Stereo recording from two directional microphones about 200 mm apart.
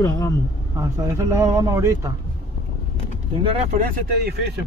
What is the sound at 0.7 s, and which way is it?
Speech, 15° right (ahead or behind).